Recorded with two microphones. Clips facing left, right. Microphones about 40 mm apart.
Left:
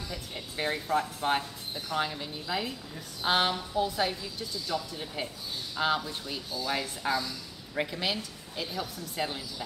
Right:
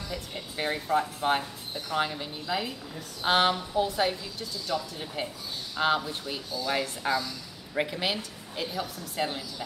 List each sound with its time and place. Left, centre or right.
0.1 s a woman's voice: centre